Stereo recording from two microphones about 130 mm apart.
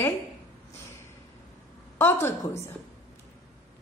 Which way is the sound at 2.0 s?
20° left (ahead or behind).